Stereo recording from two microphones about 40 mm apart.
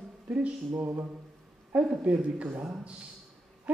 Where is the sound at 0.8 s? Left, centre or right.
Right.